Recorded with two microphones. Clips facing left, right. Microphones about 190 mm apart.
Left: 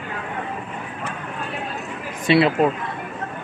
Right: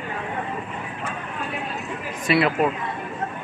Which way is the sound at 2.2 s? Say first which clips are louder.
Left 4 dB; 30° left (ahead or behind).